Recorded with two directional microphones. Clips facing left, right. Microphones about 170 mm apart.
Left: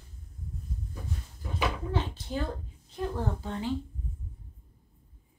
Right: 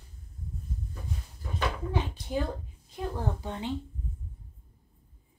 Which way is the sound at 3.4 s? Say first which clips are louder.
Left 1 dB; 20° right (ahead or behind).